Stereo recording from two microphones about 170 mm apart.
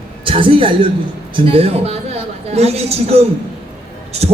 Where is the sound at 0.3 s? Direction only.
30° right (ahead or behind).